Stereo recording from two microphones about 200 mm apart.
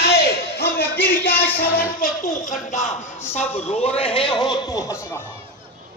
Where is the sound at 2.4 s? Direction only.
40° left (ahead or behind).